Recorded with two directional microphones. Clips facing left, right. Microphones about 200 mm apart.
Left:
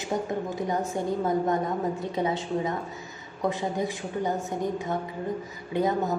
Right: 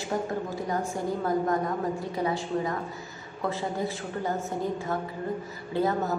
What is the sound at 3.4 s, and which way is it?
Speech, 20° left (ahead or behind).